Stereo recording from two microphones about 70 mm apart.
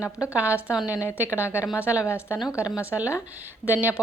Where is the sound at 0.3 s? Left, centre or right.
Right.